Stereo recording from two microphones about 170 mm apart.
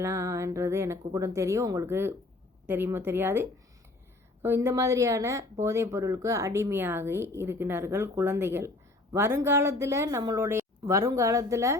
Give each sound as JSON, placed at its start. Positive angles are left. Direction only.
{"t": 0.0, "sound": "speech", "side_deg": -15}